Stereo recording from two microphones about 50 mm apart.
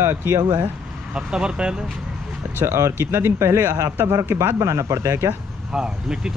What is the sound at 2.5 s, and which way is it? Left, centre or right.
Speech, right.